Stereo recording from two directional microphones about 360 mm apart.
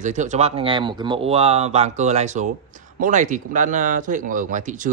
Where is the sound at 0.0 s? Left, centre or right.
Centre.